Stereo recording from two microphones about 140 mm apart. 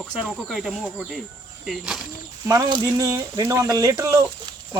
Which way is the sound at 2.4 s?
25° right (ahead or behind).